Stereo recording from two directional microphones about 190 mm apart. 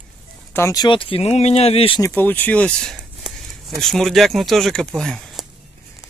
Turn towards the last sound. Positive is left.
turn(degrees=5)  # may be behind; listen again after turning